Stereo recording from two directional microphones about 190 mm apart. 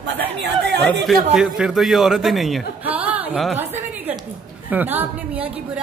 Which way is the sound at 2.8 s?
10° right (ahead or behind).